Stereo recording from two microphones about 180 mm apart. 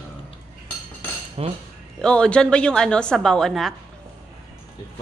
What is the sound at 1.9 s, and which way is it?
A woman's voice, 5° left (ahead or behind).